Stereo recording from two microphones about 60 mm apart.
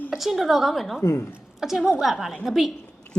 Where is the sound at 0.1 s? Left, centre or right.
Centre.